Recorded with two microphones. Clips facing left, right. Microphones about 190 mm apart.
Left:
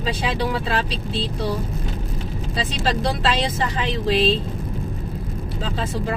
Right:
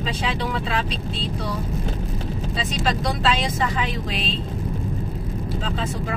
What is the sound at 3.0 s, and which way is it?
Speech, 30° left (ahead or behind).